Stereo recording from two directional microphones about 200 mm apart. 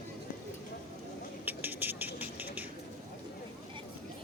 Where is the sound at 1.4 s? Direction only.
10° right (ahead or behind).